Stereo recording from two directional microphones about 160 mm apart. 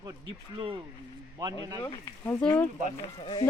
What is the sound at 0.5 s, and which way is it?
Speech, 30° right (ahead or behind).